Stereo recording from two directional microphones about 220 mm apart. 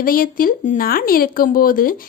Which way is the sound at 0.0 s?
40° left (ahead or behind).